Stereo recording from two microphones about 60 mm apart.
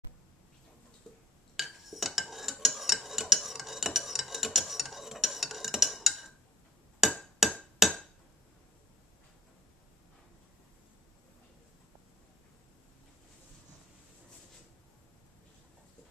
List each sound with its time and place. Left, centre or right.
1.1 s tick-tock: centre
1.6 s cutlery: centre
7.4 s a sound: centre